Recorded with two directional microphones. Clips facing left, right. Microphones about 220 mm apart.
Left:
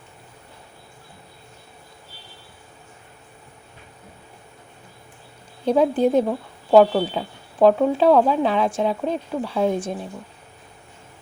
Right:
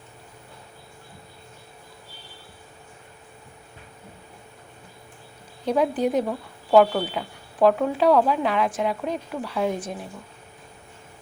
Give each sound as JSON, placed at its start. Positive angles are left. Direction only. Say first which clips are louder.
{"t": 5.6, "sound": "speech", "louder": "left 4 dB", "side_deg": 30}